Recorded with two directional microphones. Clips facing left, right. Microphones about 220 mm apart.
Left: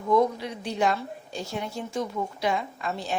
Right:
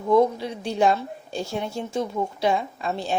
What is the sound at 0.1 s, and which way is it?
A woman's voice, 30° right (ahead or behind).